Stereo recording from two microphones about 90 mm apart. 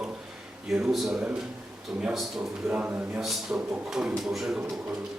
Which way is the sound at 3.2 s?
Centre (ahead or behind).